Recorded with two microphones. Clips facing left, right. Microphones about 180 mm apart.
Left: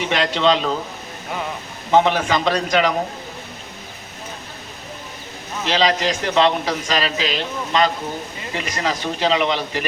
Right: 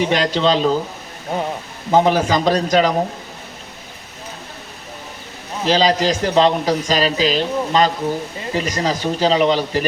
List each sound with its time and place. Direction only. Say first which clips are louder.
0.0 s a man's voice: right 2 dB; 35° right (ahead or behind)
1.9 s a man's voice: right 2 dB; 35° right (ahead or behind)
5.6 s a man's voice: right 3 dB; 35° right (ahead or behind)